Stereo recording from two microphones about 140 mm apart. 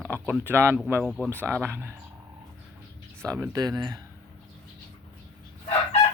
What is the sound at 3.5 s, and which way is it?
Speech, 25° right (ahead or behind).